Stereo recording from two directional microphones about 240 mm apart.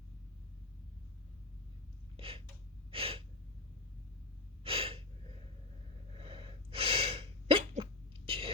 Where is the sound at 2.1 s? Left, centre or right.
Right.